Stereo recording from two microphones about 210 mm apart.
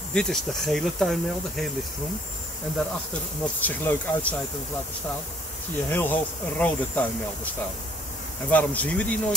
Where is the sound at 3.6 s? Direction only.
10° left (ahead or behind).